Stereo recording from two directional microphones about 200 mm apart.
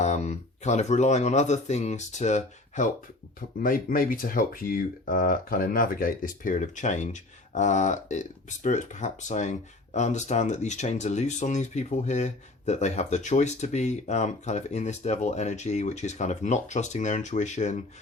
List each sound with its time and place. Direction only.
0.0 s speech: 35° left (ahead or behind)